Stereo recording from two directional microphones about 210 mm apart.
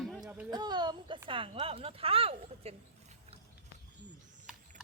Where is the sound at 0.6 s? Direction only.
20° right (ahead or behind).